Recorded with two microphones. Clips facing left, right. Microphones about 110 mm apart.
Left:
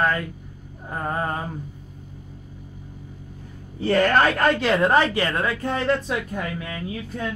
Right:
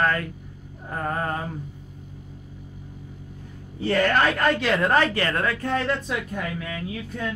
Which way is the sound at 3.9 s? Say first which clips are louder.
Left 2 dB; 40° left (ahead or behind).